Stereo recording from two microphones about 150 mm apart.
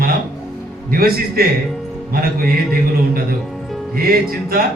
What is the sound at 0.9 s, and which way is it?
A man's voice, 80° right.